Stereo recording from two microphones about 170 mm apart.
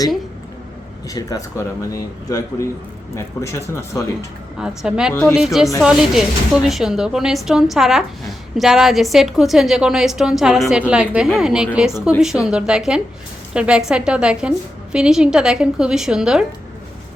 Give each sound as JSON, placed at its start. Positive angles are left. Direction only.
{"t": 1.0, "sound": "speech", "side_deg": 20}
{"t": 4.6, "sound": "a woman's voice", "side_deg": -5}